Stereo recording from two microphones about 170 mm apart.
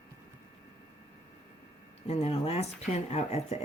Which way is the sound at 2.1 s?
40° left (ahead or behind).